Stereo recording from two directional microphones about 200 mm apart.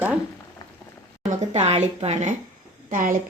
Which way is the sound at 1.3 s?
35° right (ahead or behind).